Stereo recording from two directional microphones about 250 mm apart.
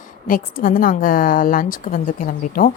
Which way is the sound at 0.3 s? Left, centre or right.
Left.